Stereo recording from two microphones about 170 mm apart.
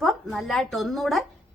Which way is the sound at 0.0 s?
Centre (ahead or behind).